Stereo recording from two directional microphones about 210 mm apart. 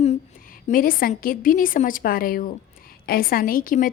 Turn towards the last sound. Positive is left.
turn(degrees=40)  # may be behind; listen again after turning